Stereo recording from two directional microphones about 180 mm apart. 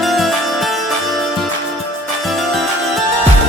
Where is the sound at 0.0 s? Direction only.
Centre (ahead or behind).